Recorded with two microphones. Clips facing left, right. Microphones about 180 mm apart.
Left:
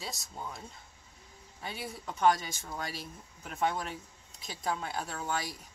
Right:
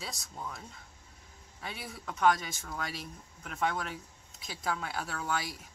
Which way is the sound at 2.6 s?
25° left (ahead or behind).